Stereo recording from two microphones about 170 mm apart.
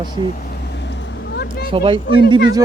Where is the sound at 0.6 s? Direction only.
90° left.